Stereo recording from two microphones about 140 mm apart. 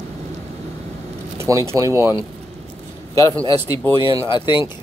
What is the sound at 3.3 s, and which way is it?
Speech, 25° right (ahead or behind).